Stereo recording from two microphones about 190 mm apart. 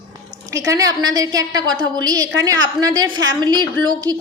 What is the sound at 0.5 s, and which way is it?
A woman's voice, 15° right (ahead or behind).